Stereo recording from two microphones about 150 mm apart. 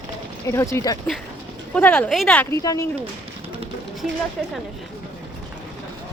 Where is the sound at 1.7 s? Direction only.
10° left (ahead or behind).